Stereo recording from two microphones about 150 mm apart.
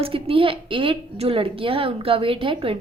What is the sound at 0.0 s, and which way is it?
A woman's voice, 40° right (ahead or behind).